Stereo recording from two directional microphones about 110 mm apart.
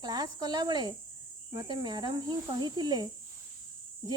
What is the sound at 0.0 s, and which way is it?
Cricket, 40° right (ahead or behind).